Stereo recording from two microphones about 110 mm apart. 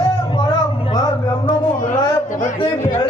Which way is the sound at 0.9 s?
35° left (ahead or behind).